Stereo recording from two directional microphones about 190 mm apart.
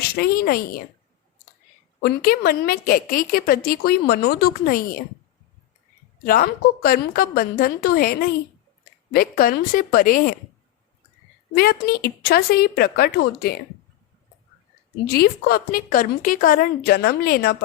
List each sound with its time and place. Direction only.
0.0 s a woman's voice: 55° left (ahead or behind)
2.0 s a woman's voice: 55° left (ahead or behind)
6.2 s a woman's voice: 50° left (ahead or behind)
11.5 s a woman's voice: 55° left (ahead or behind)
15.1 s a woman's voice: 55° left (ahead or behind)